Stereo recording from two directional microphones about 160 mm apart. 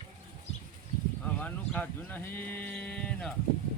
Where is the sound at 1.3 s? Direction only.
10° left (ahead or behind).